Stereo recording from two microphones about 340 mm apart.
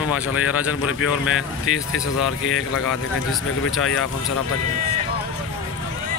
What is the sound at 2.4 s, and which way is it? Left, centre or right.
Speech, left.